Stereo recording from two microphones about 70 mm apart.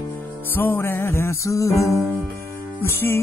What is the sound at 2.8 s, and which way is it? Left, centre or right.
Music, left.